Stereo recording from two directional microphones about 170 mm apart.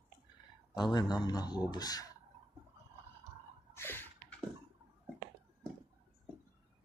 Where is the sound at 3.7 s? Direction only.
10° left (ahead or behind).